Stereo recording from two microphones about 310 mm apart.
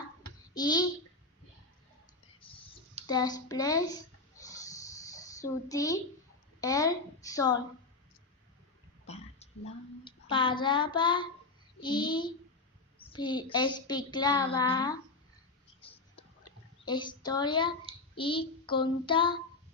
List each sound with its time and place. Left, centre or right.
0.5 s a child's voice: centre
3.1 s a child's voice: centre
4.4 s a sound: centre
6.6 s a child's voice: centre
9.0 s a sound: left
10.0 s a child's voice: centre
16.8 s a child's voice: centre